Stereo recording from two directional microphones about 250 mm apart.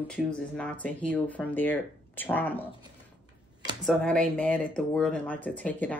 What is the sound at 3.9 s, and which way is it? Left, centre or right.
Speech, centre.